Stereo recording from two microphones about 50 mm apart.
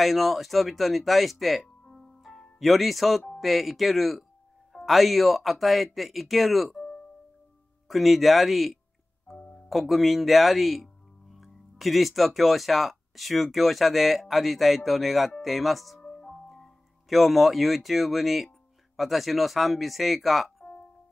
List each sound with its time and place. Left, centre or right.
0.0 s speech: centre
1.9 s music: centre
3.3 s speech: centre
6.7 s music: centre
7.9 s speech: centre
9.4 s music: centre
9.7 s speech: centre
16.0 s music: left
16.3 s speech: centre